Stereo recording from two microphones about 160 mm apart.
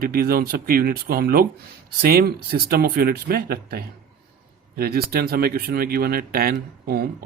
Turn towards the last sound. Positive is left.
turn(degrees=-75)  # may be behind; listen again after turning